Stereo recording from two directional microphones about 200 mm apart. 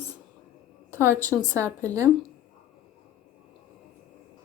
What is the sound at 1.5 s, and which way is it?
Speech, 15° right (ahead or behind).